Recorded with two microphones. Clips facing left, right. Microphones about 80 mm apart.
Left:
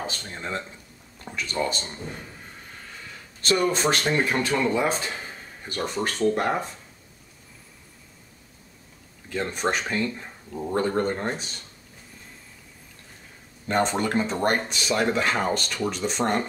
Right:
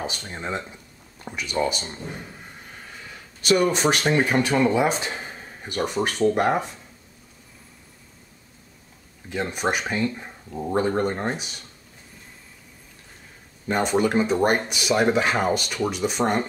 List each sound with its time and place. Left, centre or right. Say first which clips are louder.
0.0 s speech: right 2 dB; centre
3.4 s speech: right 3 dB; centre
9.3 s speech: right 1 dB; centre
13.7 s speech: right 2 dB; centre